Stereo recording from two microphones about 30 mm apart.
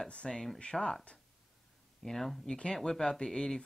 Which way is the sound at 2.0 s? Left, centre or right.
Centre.